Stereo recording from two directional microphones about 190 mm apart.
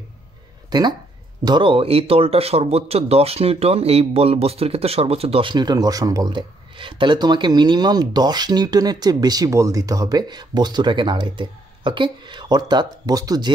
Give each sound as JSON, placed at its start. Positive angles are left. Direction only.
{"t": 0.7, "sound": "speech", "side_deg": -20}